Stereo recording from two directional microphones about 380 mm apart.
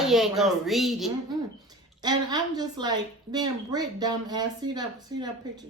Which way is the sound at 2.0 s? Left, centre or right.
Centre.